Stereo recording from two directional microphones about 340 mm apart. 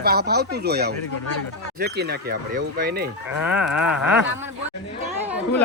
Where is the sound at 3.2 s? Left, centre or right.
Centre.